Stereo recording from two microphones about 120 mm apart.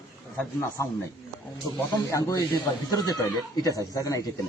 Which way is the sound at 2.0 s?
30° left (ahead or behind).